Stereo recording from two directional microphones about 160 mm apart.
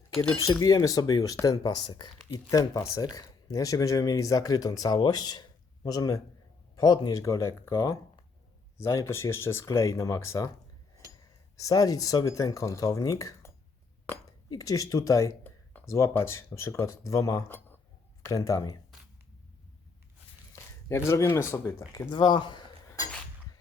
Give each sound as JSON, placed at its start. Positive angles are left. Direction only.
{"t": 0.6, "sound": "speech", "side_deg": 25}
{"t": 11.6, "sound": "speech", "side_deg": 20}
{"t": 14.5, "sound": "speech", "side_deg": 20}
{"t": 20.5, "sound": "speech", "side_deg": 15}
{"t": 23.0, "sound": "dishes", "side_deg": 20}